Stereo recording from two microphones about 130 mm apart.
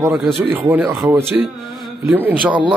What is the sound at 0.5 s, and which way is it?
Speech, 15° right (ahead or behind).